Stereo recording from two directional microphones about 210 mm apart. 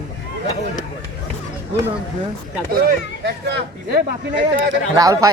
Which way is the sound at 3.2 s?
50° right (ahead or behind).